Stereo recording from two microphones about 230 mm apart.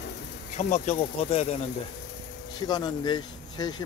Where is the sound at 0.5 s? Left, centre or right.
Left.